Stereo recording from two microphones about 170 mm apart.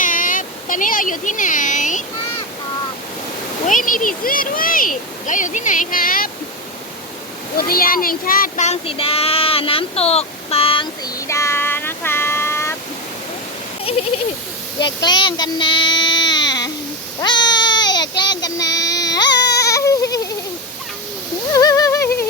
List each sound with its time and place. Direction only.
0.0 s a sound: 50° left (ahead or behind)
3.7 s speech: 50° left (ahead or behind)
7.7 s child singing: 55° left (ahead or behind); by 11.1 s 30° left (ahead or behind)
11.3 s child singing: 15° left (ahead or behind)
13.9 s a sound: 35° left (ahead or behind)
14.8 s baby cry: 25° left (ahead or behind)
17.2 s a sound: 25° left (ahead or behind)
18.2 s child singing: 25° left (ahead or behind)
19.3 s baby cry: 80° left
19.6 s goat: 20° left (ahead or behind)
21.5 s humming: 20° left (ahead or behind)